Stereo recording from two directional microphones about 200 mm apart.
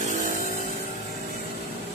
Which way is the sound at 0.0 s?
40° right (ahead or behind).